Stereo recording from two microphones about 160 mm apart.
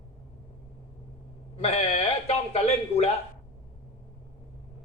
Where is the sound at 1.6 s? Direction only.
40° left (ahead or behind).